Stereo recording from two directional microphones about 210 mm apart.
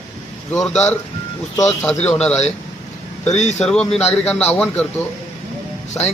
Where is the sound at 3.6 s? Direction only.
5° left (ahead or behind).